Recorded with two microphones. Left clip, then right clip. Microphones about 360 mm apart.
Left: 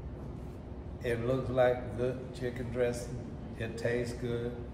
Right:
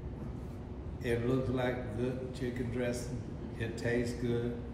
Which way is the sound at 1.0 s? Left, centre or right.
Centre.